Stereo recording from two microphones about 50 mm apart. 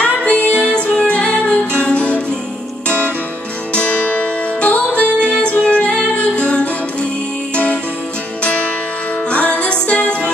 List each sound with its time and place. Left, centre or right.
0.0 s music: left
3.7 s music: left